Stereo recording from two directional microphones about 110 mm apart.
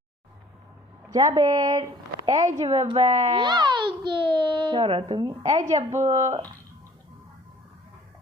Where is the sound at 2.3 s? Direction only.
90° right.